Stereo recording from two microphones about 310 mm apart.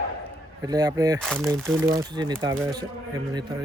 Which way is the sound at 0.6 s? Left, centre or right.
Centre.